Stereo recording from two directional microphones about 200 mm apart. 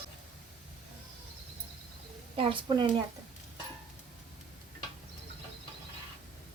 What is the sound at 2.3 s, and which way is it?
Speech, 25° right (ahead or behind).